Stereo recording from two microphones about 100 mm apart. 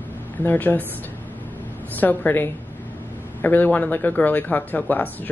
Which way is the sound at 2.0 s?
20° left (ahead or behind).